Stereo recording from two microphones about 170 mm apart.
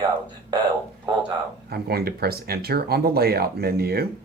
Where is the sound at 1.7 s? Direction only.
65° right (ahead or behind).